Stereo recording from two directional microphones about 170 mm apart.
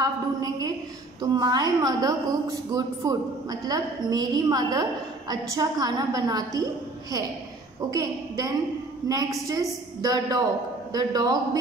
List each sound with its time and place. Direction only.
0.0 s a woman's voice: 20° right (ahead or behind)
7.9 s a woman's voice: 20° right (ahead or behind)